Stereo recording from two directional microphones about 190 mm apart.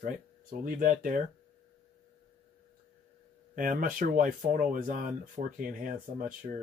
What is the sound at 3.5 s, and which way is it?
Speech, 45° right (ahead or behind).